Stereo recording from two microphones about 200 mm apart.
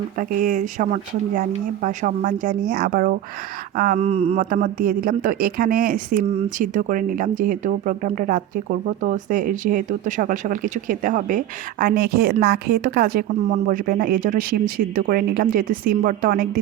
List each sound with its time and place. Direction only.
0.2 s speech: 40° right (ahead or behind)